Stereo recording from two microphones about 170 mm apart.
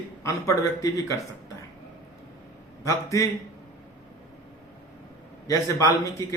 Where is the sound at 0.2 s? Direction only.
20° left (ahead or behind).